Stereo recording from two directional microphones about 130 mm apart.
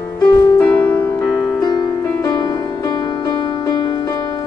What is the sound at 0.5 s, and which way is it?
Music, 10° left (ahead or behind).